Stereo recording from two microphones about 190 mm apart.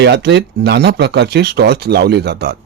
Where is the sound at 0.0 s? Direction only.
60° right (ahead or behind).